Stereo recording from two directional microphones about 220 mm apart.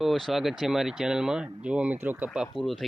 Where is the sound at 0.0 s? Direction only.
Centre (ahead or behind).